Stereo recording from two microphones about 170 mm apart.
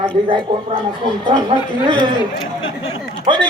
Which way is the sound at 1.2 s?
25° right (ahead or behind).